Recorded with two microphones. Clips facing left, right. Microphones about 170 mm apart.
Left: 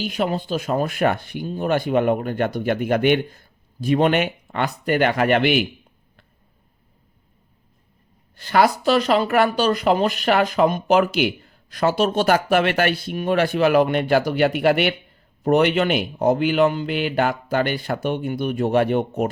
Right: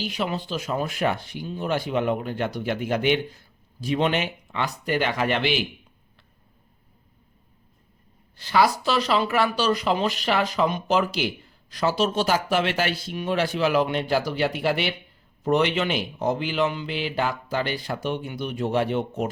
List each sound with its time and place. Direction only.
0.0 s speech: 50° left (ahead or behind)
8.4 s speech: 55° left (ahead or behind)